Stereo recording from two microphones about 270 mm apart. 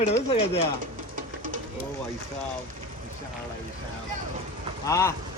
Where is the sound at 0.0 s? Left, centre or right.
Left.